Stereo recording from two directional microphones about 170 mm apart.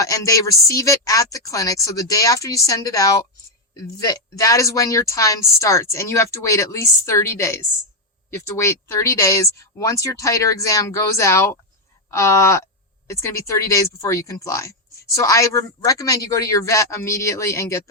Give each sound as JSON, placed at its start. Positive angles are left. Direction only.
{"t": 0.0, "sound": "speech", "side_deg": 20}